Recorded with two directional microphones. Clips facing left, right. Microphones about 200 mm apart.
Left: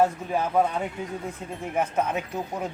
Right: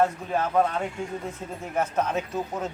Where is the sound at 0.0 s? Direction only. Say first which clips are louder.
Left 1 dB; 10° left (ahead or behind).